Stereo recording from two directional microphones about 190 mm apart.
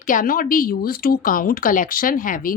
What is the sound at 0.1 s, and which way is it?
A woman's voice, 45° left (ahead or behind).